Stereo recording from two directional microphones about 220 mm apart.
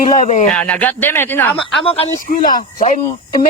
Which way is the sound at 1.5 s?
25° left (ahead or behind).